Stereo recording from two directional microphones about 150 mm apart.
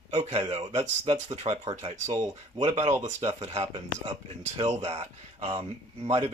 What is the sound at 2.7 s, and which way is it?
Speech, 35° right (ahead or behind).